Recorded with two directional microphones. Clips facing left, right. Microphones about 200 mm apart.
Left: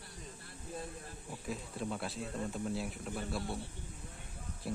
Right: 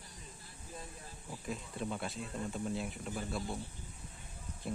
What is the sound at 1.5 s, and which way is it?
Speech, centre (ahead or behind).